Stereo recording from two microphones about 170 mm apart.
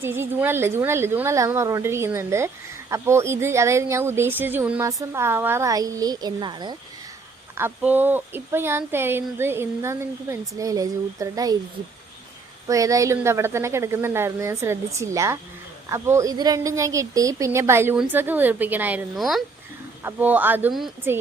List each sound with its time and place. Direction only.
0.0 s a woman's voice: 15° right (ahead or behind)
7.5 s a woman's voice: 10° right (ahead or behind)
12.6 s speech: 20° right (ahead or behind)